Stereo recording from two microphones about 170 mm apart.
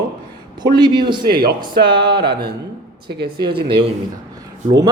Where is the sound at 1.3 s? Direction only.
65° right (ahead or behind).